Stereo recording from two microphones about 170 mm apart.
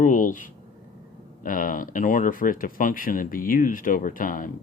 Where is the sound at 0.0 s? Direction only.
50° left (ahead or behind).